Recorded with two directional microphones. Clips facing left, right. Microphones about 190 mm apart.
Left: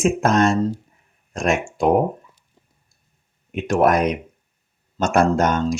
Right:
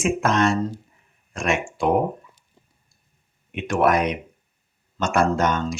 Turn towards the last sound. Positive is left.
turn(degrees=45)  # may be behind; listen again after turning